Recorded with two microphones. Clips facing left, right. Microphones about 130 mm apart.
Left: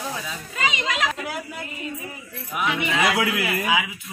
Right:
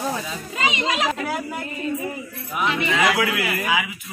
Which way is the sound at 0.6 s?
25° right (ahead or behind).